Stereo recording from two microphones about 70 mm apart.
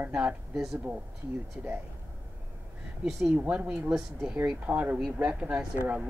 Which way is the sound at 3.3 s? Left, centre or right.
Centre.